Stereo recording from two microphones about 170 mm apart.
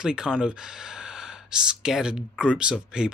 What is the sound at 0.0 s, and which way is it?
Speech, 5° right (ahead or behind).